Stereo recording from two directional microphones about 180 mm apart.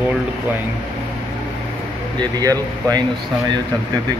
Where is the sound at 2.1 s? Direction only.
20° right (ahead or behind).